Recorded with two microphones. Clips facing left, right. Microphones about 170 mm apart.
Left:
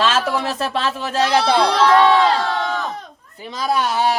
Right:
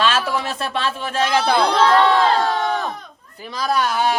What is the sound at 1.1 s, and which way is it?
Speech, 30° left (ahead or behind).